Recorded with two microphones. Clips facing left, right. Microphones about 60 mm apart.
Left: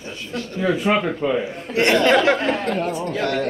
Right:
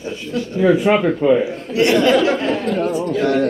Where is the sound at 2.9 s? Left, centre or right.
Centre.